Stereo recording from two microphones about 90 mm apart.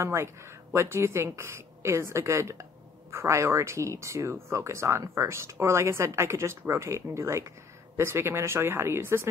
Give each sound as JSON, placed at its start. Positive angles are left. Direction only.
{"t": 0.0, "sound": "speech", "side_deg": -30}